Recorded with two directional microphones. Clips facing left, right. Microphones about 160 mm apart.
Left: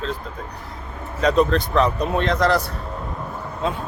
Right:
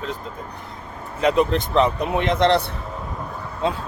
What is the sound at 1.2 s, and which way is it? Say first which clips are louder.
Speech: left 1 dB; 20° right (ahead or behind).